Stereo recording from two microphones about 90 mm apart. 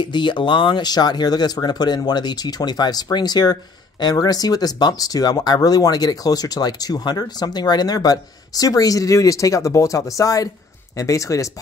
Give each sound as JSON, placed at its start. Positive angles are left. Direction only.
{"t": 0.0, "sound": "speech", "side_deg": 60}